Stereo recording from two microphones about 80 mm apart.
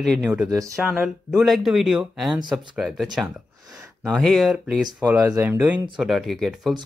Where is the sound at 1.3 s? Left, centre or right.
Centre.